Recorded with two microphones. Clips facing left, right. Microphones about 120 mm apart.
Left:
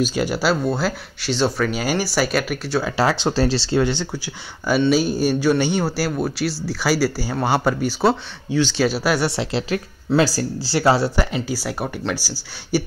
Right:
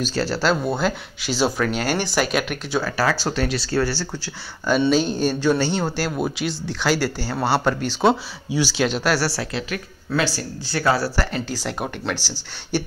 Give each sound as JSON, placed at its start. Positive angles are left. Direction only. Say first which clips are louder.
{"t": 0.0, "sound": "speech", "louder": "left 2 dB", "side_deg": 15}
{"t": 0.7, "sound": "speech", "louder": "even", "side_deg": 0}
{"t": 2.8, "sound": "speech", "louder": "left 2 dB", "side_deg": 25}
{"t": 8.5, "sound": "speech", "louder": "left 3 dB", "side_deg": -10}
{"t": 8.7, "sound": "a woman's voice", "louder": "left 1 dB", "side_deg": 5}
{"t": 11.3, "sound": "speech", "louder": "left 2 dB", "side_deg": 10}
{"t": 11.8, "sound": "speech", "louder": "left 2 dB", "side_deg": -5}
{"t": 12.2, "sound": "speech", "louder": "left 2 dB", "side_deg": 10}